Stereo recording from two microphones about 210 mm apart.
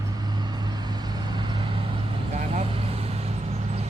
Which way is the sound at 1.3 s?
20° right (ahead or behind).